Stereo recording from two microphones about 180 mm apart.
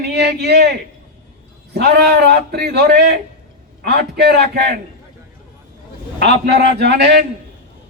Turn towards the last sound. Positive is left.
turn(degrees=-70)  # may be behind; listen again after turning